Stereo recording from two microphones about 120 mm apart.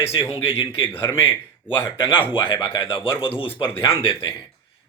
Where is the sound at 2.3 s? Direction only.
45° left (ahead or behind).